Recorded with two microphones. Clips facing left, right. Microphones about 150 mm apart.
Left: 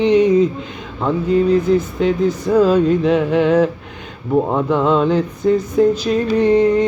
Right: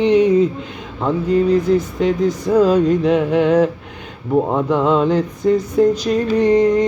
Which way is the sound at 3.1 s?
55° right (ahead or behind).